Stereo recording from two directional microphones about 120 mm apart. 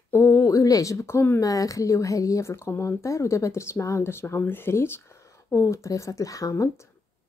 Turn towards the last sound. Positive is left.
turn(degrees=25)  # may be behind; listen again after turning